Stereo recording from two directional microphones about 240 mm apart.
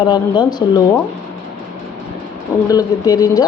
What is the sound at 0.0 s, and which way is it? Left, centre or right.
Speech, centre.